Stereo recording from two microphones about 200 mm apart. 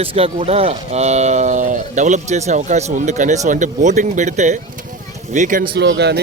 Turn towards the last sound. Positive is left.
turn(degrees=-55)  # may be behind; listen again after turning